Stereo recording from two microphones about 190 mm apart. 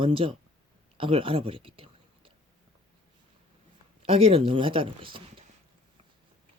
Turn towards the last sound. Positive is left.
turn(degrees=-25)  # may be behind; listen again after turning